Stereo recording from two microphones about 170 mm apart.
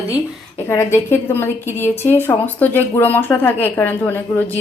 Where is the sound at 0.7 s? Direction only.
15° left (ahead or behind).